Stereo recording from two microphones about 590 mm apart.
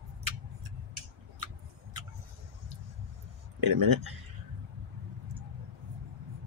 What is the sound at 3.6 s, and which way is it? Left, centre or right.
Speech, right.